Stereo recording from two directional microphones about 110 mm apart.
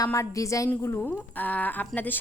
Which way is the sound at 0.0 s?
30° left (ahead or behind).